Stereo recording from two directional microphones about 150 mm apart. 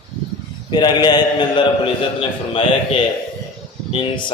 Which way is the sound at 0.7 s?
30° left (ahead or behind).